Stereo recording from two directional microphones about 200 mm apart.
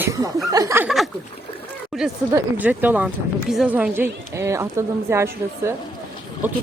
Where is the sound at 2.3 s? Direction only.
10° right (ahead or behind).